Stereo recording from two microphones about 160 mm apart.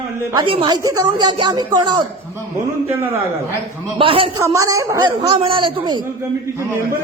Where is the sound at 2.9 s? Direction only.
15° right (ahead or behind).